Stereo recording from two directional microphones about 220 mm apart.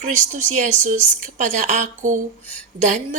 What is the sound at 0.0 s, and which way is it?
A woman's voice, 35° right (ahead or behind).